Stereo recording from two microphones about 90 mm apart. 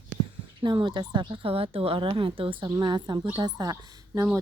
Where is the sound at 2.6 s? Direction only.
55° right (ahead or behind).